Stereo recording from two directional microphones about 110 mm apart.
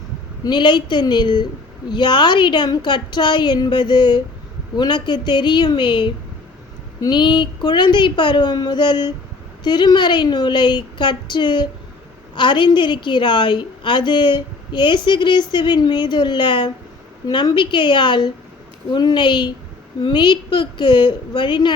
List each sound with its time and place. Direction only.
0.4 s a woman's voice: 45° left (ahead or behind)